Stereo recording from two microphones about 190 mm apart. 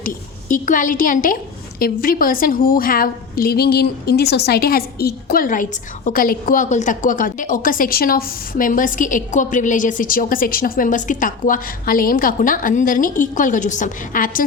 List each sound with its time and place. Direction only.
0.0 s a woman's voice: 45° left (ahead or behind)